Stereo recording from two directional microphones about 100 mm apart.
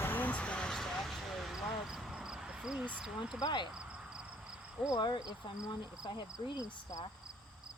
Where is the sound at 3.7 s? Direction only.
10° right (ahead or behind).